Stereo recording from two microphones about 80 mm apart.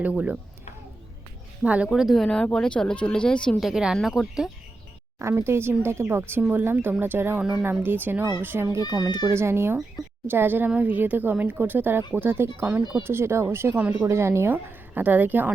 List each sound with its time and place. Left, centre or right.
0.0 s speech: centre
1.6 s speech: centre
1.9 s speech: centre
3.6 s speech: centre
5.2 s a woman's voice: right
13.7 s a woman's voice: right
14.1 s a woman's voice: right